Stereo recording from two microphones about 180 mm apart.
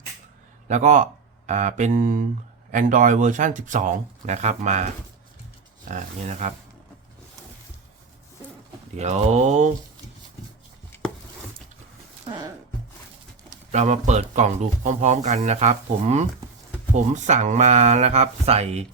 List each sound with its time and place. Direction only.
0.7 s speech: 45° right (ahead or behind)
9.0 s speech: 40° right (ahead or behind)
12.2 s music: 25° right (ahead or behind)
13.7 s speech: 40° right (ahead or behind)